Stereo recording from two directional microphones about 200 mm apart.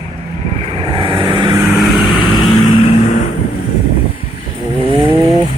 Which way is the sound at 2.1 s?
20° left (ahead or behind).